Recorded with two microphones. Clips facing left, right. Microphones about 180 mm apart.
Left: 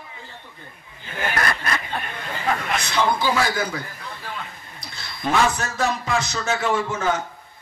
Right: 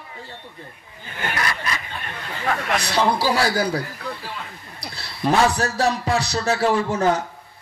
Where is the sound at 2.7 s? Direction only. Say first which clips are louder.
Right 3 dB; 35° right (ahead or behind).